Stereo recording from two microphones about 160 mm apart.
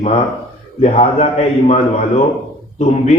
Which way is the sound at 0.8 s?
40° left (ahead or behind).